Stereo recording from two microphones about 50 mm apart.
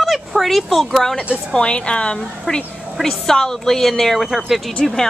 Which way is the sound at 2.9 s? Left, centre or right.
Centre.